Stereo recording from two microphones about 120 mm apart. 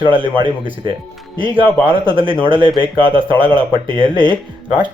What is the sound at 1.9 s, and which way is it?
Speech, 45° right (ahead or behind).